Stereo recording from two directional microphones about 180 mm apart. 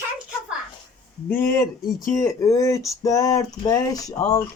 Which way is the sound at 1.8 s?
50° left (ahead or behind).